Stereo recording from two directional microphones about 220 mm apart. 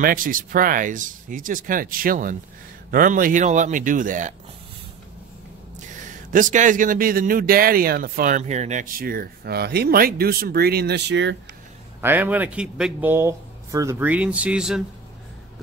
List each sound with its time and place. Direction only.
0.0 s speech: 40° right (ahead or behind)
6.3 s speech: 35° right (ahead or behind); by 11.3 s 55° right (ahead or behind)
12.0 s speech: 10° right (ahead or behind)